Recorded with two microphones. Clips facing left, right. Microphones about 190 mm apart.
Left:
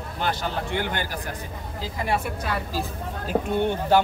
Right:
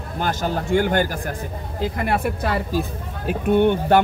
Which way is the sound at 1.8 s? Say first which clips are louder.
Right 5 dB; 60° right (ahead or behind).